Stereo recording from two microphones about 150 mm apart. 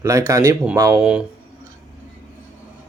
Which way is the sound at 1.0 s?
5° right (ahead or behind).